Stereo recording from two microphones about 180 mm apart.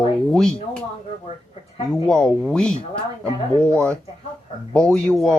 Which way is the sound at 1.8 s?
5° left (ahead or behind).